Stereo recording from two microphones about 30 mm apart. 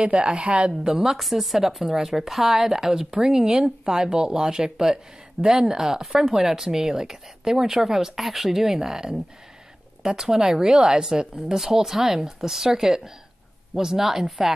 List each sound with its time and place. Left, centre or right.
0.0 s speech: right
0.9 s speech: centre
2.7 s speech: centre